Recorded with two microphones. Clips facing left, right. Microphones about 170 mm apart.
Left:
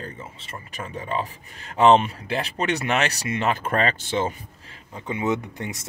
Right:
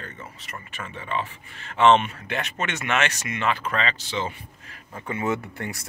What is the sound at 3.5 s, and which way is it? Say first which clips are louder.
Speech: left 3 dB; 50° left (ahead or behind).